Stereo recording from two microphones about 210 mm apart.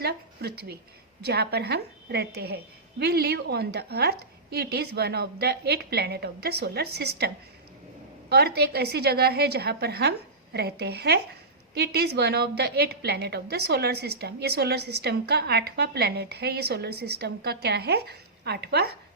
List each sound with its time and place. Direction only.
0.0 s a woman's voice: 50° right (ahead or behind)
8.3 s a woman's voice: 50° right (ahead or behind)